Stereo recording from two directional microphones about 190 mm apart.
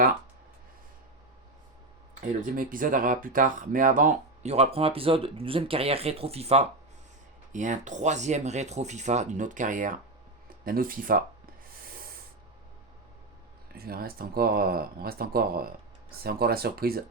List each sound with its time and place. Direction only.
2.2 s speech: 45° right (ahead or behind)
13.7 s speech: 55° right (ahead or behind)